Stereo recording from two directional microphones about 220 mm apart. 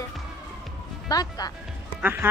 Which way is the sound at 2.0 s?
10° right (ahead or behind).